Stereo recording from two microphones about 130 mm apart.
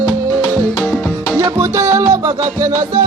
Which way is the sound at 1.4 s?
20° right (ahead or behind).